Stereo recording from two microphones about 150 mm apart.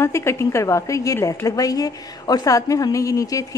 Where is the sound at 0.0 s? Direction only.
15° left (ahead or behind).